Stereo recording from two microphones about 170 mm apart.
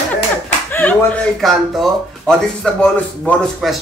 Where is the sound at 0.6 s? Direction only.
10° left (ahead or behind).